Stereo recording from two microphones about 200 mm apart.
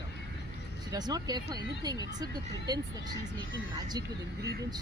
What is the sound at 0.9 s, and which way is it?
Speech, 20° right (ahead or behind).